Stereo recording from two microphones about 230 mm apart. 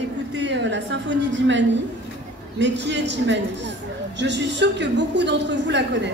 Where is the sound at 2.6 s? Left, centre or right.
Right.